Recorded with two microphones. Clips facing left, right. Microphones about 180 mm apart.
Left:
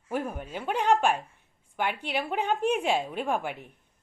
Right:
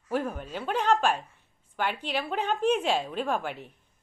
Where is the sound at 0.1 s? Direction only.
10° left (ahead or behind).